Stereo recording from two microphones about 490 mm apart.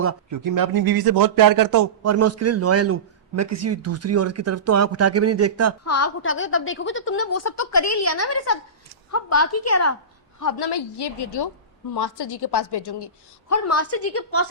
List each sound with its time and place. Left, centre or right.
0.0 s speech: right
0.4 s speech: right
5.8 s a woman's voice: left
10.4 s a woman's voice: left
13.5 s a woman's voice: left